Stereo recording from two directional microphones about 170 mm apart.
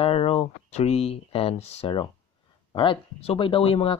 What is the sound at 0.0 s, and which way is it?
Speech, 35° left (ahead or behind).